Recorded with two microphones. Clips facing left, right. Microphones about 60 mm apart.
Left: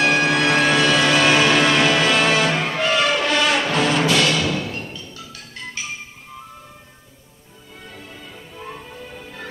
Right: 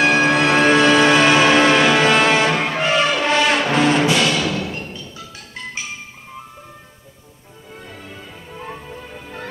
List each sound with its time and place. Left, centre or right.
0.1 s music: right